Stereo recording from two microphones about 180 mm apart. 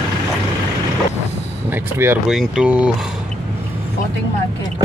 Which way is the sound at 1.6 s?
10° right (ahead or behind).